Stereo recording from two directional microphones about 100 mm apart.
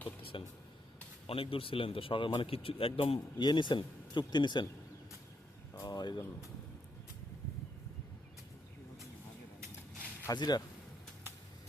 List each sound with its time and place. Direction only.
0.3 s speech: 60° left (ahead or behind)
3.4 s speech: 50° left (ahead or behind)
5.7 s a sound: 35° left (ahead or behind)
10.3 s speech: 45° left (ahead or behind)